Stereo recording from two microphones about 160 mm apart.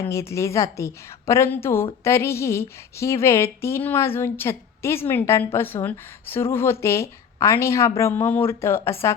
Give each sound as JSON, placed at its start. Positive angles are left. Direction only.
{"t": 0.1, "sound": "a woman's voice", "side_deg": 20}